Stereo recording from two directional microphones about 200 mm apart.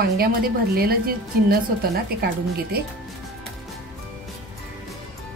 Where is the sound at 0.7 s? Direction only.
50° right (ahead or behind).